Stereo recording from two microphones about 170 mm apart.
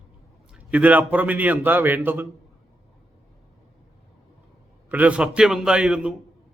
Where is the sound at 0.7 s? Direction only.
10° right (ahead or behind).